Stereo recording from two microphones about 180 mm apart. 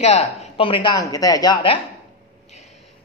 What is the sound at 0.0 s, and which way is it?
Speech, 40° left (ahead or behind).